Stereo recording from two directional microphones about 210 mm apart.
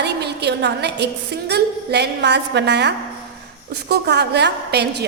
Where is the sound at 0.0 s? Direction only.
50° right (ahead or behind).